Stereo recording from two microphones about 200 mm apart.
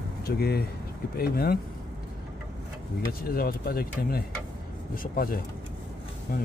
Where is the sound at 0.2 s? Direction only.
50° left (ahead or behind).